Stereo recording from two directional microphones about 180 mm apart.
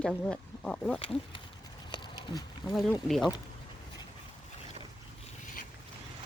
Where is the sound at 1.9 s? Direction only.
25° left (ahead or behind).